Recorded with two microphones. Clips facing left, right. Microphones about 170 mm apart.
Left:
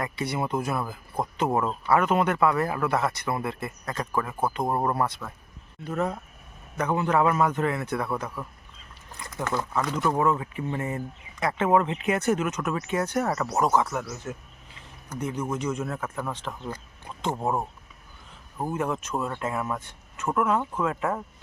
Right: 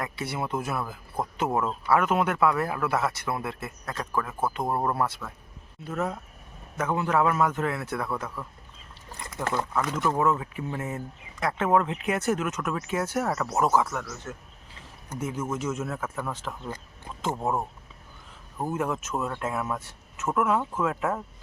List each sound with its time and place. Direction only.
0.0 s speech: centre (ahead or behind)
9.7 s speech: centre (ahead or behind)
14.0 s speech: 10° left (ahead or behind)
15.2 s speech: 5° right (ahead or behind)